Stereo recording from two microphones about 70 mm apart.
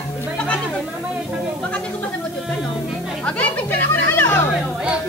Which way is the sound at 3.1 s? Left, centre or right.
Centre.